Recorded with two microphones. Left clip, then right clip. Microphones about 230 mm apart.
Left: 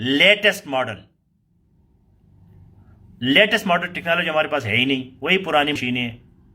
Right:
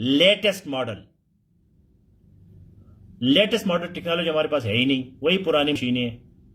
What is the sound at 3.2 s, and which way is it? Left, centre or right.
Speech, right.